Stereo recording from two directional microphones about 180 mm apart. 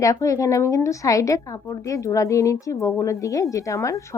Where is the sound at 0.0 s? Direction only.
20° left (ahead or behind).